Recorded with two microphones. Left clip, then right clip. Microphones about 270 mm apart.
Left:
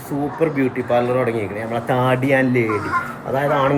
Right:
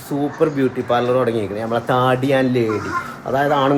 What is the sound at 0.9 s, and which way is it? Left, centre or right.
A man's voice, centre.